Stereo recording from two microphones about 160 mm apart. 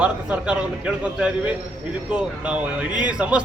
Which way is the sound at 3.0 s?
5° right (ahead or behind).